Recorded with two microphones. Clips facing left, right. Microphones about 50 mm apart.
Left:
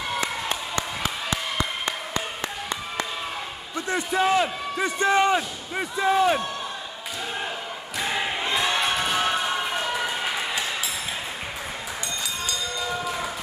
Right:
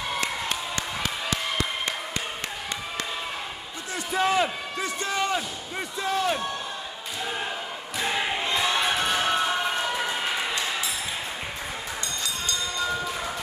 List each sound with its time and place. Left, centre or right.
4.1 s a sound: centre
4.9 s speech: left
8.0 s crowd: centre